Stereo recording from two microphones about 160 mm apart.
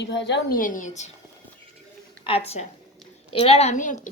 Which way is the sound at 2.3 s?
35° left (ahead or behind).